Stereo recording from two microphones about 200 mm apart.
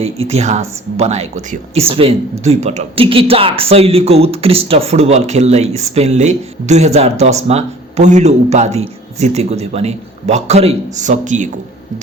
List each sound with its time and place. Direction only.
0.0 s a man's voice: 30° right (ahead or behind)